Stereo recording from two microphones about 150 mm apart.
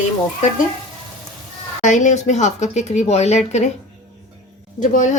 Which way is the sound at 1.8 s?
55° left (ahead or behind).